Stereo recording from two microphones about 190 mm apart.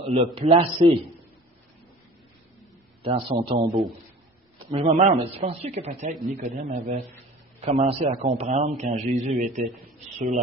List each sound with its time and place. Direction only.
0.1 s speech: 35° right (ahead or behind)
3.0 s speech: 30° right (ahead or behind)